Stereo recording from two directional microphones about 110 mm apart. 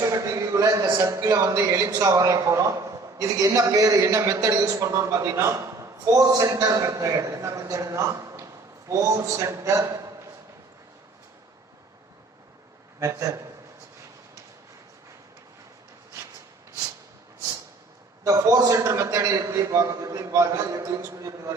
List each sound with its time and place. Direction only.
0.1 s a sound: 30° right (ahead or behind)
1.0 s a man's voice: 25° right (ahead or behind)
13.0 s a man's voice: 30° right (ahead or behind)
18.2 s a man's voice: 30° right (ahead or behind)